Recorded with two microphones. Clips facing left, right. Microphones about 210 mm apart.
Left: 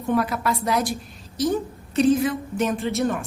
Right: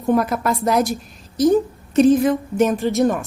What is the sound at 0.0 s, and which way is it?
Speech, 45° right (ahead or behind).